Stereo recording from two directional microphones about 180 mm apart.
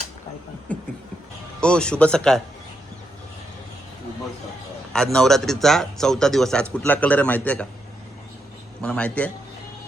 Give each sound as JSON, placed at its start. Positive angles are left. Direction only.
{"t": 0.7, "sound": "a man's voice", "side_deg": 5}
{"t": 4.9, "sound": "speech", "side_deg": 0}
{"t": 8.8, "sound": "a man's voice", "side_deg": 5}